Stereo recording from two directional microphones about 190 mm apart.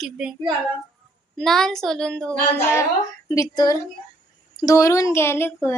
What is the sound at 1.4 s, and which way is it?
A woman's voice, 5° left (ahead or behind).